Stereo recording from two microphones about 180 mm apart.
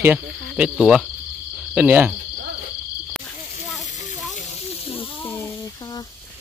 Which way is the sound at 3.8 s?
45° left (ahead or behind).